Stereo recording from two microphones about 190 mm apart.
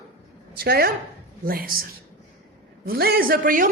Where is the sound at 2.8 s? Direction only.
55° right (ahead or behind).